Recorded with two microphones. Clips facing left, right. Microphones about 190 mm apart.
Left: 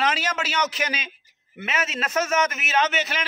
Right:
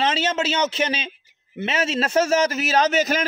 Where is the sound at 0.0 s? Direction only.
25° right (ahead or behind).